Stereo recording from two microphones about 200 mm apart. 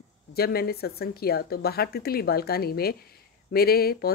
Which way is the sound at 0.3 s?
50° left (ahead or behind).